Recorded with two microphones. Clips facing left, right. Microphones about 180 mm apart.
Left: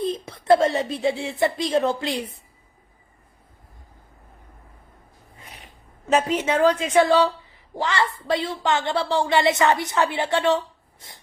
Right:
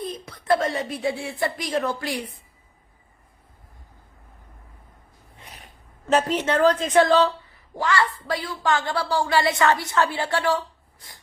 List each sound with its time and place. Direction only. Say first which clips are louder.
0.0 s speech: left 6 dB; 25° left (ahead or behind)
5.4 s sneeze: even; centre (ahead or behind)
6.1 s a woman's voice: even; 10° left (ahead or behind)
7.8 s a woman's voice: right 1 dB; 20° left (ahead or behind)